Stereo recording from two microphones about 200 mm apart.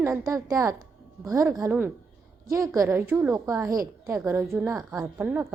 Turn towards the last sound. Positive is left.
turn(degrees=-10)  # may be behind; listen again after turning